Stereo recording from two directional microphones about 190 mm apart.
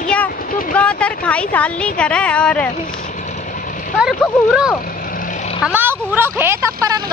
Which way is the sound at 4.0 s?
5° right (ahead or behind).